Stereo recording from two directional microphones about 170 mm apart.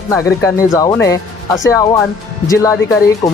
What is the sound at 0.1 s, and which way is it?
Speech, 20° left (ahead or behind).